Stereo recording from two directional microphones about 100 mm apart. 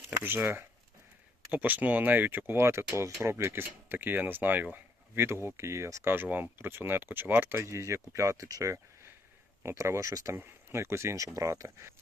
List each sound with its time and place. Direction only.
0.2 s speech: 20° right (ahead or behind)